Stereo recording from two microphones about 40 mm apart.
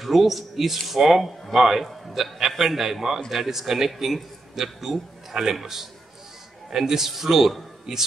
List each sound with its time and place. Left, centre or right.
0.0 s a man's voice: centre
7.9 s speech: centre